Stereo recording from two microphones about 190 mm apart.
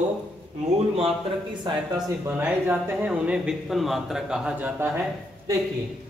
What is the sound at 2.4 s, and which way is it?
Speech, 5° right (ahead or behind).